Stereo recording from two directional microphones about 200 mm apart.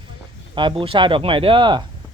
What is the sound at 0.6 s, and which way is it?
A man's voice, 25° right (ahead or behind).